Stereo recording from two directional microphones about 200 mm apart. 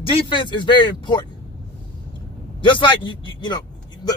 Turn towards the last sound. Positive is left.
turn(degrees=20)  # may be behind; listen again after turning